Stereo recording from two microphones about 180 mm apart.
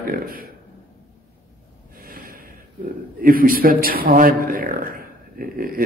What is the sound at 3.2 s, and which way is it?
A man's voice, 55° right (ahead or behind).